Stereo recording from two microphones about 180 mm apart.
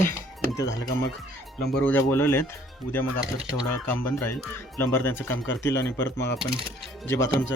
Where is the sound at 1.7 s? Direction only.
10° left (ahead or behind).